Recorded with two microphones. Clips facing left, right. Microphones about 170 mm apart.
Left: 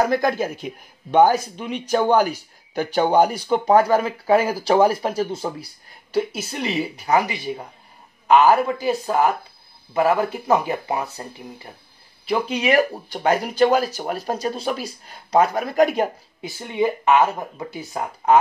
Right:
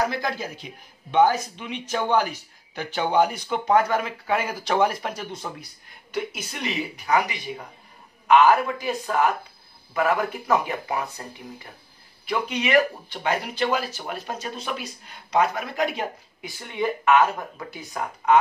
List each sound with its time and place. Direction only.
0.1 s speech: 50° left (ahead or behind)
16.3 s speech: 25° left (ahead or behind)